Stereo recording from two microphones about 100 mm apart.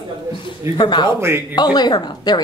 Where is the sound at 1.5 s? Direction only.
45° left (ahead or behind).